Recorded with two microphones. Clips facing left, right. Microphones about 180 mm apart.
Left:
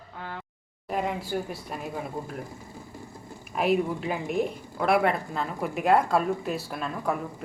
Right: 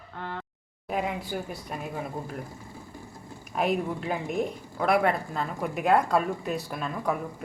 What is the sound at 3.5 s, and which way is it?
A woman's voice, 5° left (ahead or behind).